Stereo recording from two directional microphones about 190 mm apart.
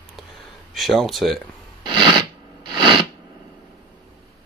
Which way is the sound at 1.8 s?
25° right (ahead or behind).